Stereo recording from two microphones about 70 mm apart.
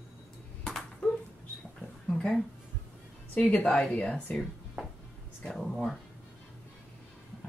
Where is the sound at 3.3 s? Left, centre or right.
Centre.